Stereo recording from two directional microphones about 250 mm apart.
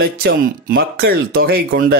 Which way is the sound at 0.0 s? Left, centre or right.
Right.